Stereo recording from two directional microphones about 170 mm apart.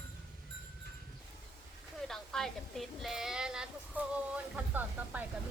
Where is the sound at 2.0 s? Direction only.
Centre (ahead or behind).